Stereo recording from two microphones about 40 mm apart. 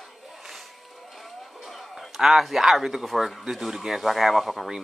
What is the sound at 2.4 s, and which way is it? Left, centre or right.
Speech, centre.